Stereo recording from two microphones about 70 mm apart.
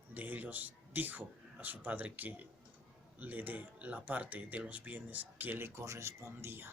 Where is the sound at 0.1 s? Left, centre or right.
Right.